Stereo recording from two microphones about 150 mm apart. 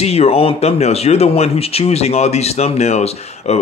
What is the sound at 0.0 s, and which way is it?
Speech, 45° left (ahead or behind).